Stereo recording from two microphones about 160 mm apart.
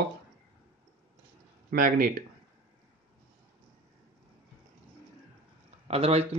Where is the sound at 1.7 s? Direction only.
65° right (ahead or behind).